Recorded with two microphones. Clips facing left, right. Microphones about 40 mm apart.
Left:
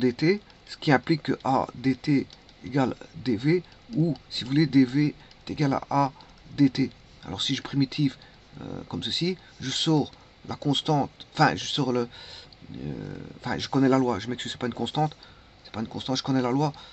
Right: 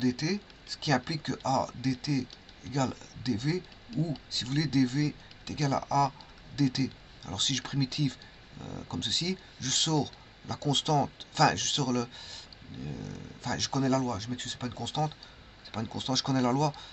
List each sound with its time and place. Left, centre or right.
0.0 s speech: left
3.9 s speech: centre
4.3 s speech: centre
13.8 s speech: left
15.7 s speech: centre